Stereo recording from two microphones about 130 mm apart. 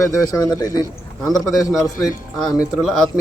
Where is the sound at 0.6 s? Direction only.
30° left (ahead or behind).